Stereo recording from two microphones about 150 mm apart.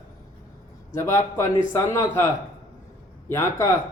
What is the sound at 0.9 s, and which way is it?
Speech, 20° left (ahead or behind).